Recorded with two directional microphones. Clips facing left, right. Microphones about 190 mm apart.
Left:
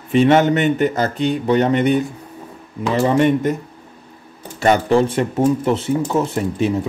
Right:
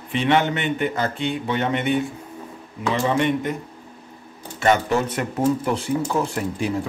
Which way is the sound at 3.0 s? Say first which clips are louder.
Left 7 dB; 40° left (ahead or behind).